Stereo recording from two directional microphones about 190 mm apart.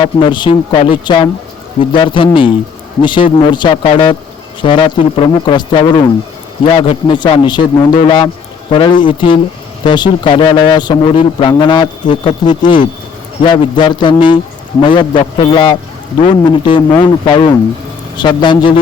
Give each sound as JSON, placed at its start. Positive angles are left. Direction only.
{"t": 0.0, "sound": "a man's voice", "side_deg": 25}